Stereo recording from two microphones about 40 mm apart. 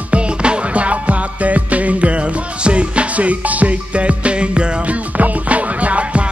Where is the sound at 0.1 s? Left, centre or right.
Right.